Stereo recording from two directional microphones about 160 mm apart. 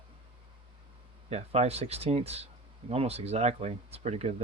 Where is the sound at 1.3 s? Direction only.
40° right (ahead or behind).